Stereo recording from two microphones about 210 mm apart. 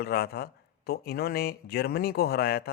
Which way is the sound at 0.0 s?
50° left (ahead or behind).